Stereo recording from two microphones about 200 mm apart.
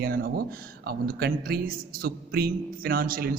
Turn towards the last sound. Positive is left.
turn(degrees=-45)  # may be behind; listen again after turning